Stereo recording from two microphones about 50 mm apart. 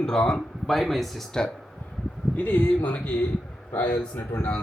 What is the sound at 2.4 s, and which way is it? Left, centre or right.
Speech, left.